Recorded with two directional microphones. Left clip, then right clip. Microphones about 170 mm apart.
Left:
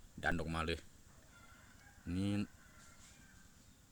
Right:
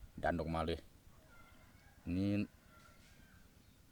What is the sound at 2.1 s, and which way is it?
Speech, 15° right (ahead or behind).